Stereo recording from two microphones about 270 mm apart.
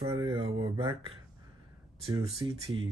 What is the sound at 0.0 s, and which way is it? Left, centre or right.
Speech, centre.